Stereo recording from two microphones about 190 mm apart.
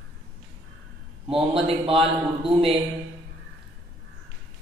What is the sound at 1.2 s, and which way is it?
Mantra, 30° right (ahead or behind).